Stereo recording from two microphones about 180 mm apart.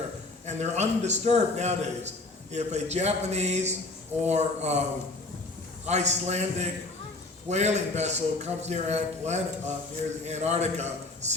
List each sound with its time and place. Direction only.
0.4 s a man's voice: 40° right (ahead or behind)
5.9 s a man's voice: 40° right (ahead or behind)